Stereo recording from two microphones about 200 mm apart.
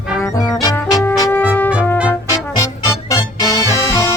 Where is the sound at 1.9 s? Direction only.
5° right (ahead or behind).